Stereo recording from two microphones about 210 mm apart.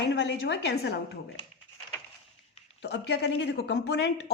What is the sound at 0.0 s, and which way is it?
A woman's voice, 55° left (ahead or behind).